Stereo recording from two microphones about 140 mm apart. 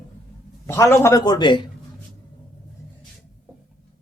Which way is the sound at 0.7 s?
15° left (ahead or behind).